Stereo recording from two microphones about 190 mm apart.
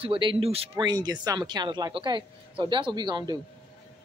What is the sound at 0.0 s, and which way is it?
Speech, 25° right (ahead or behind).